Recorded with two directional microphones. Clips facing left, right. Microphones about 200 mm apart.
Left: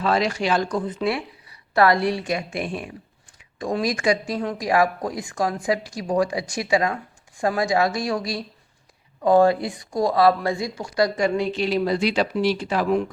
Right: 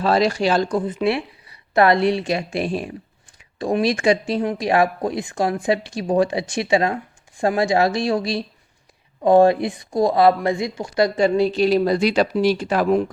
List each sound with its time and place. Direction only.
0.0 s speech: 35° right (ahead or behind)
0.8 s speech: 20° right (ahead or behind); by 13.0 s 50° right (ahead or behind)